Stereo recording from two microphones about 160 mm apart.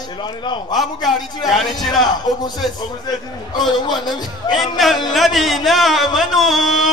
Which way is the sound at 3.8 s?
25° left (ahead or behind).